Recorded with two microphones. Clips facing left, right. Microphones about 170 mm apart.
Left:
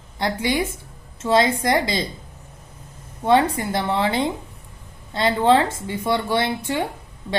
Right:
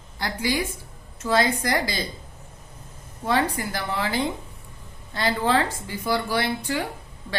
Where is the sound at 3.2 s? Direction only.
25° left (ahead or behind).